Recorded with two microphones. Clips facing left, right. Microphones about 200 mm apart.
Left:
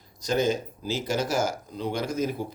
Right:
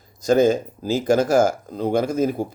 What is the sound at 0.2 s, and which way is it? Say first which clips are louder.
Speech: right 8 dB; 45° right (ahead or behind).